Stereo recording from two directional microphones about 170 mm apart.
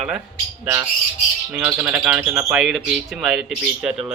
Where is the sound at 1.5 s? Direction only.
10° right (ahead or behind).